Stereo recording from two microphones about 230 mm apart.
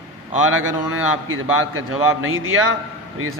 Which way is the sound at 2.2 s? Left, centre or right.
Right.